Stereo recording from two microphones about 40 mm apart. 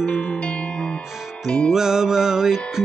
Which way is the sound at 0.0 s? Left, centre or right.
Left.